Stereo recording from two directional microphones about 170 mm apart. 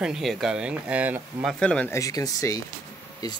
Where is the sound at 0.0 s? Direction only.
Centre (ahead or behind).